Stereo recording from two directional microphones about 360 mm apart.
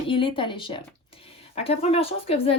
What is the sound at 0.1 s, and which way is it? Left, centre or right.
A woman's voice, centre.